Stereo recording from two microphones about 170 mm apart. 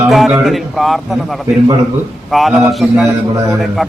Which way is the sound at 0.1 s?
Centre (ahead or behind).